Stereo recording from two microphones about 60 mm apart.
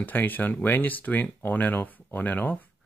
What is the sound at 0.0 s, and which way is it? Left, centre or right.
Speech, left.